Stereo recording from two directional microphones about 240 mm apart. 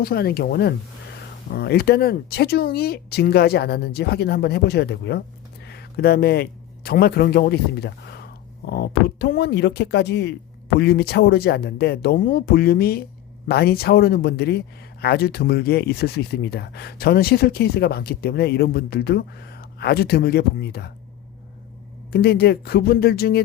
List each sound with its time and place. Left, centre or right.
0.0 s a man's voice: left
22.1 s speech: left